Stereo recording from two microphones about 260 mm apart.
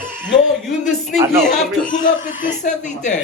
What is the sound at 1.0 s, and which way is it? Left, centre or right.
Speech, centre.